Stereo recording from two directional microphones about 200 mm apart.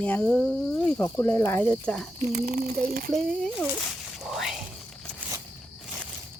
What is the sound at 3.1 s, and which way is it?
Cricket, 5° left (ahead or behind).